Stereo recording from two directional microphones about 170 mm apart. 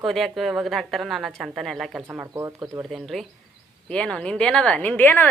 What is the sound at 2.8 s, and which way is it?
A woman's voice, centre (ahead or behind).